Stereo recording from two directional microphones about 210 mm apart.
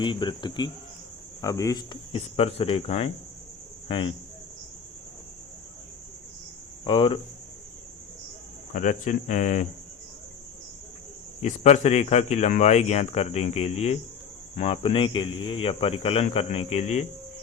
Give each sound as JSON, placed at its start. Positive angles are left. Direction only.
{"t": 0.0, "sound": "speech", "side_deg": 25}
{"t": 6.8, "sound": "speech", "side_deg": 25}
{"t": 8.7, "sound": "speech", "side_deg": 35}
{"t": 11.4, "sound": "speech", "side_deg": 35}